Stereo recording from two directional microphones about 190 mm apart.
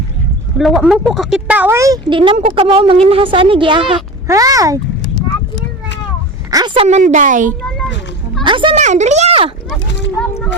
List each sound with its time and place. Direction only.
0.6 s speech: centre (ahead or behind); by 4.8 s 20° right (ahead or behind)
6.5 s speech: 20° right (ahead or behind)
6.8 s speech: 40° right (ahead or behind)
8.4 s speech: 25° right (ahead or behind)
8.8 s speech: 40° right (ahead or behind)
10.2 s speech: 5° left (ahead or behind)